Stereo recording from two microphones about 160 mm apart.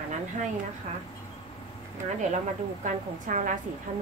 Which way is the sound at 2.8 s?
50° right (ahead or behind).